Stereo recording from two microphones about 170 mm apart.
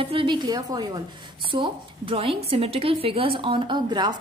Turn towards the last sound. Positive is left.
turn(degrees=-25)  # may be behind; listen again after turning